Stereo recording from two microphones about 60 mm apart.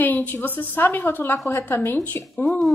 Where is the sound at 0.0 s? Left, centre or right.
Left.